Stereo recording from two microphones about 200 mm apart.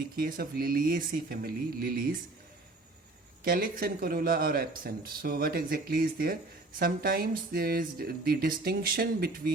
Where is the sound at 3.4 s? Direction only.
45° right (ahead or behind).